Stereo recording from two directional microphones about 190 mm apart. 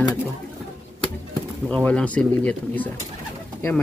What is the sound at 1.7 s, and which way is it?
Speech, 5° left (ahead or behind).